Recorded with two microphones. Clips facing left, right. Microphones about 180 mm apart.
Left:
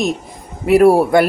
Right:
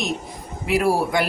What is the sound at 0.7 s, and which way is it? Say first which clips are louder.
Speech: left 10 dB; 60° left (ahead or behind).